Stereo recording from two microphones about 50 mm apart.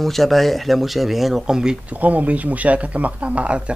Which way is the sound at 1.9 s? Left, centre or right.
Right.